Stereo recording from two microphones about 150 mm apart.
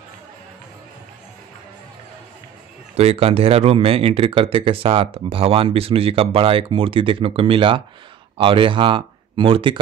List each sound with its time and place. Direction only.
3.0 s speech: 40° right (ahead or behind)